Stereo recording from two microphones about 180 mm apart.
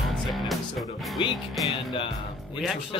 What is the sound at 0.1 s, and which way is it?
Music, centre (ahead or behind).